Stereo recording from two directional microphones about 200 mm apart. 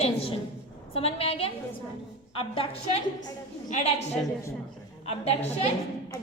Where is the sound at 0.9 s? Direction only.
30° left (ahead or behind).